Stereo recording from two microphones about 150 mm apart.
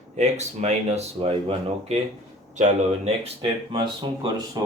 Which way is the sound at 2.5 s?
50° right (ahead or behind).